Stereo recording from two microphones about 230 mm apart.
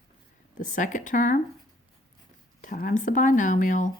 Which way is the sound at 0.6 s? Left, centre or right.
Left.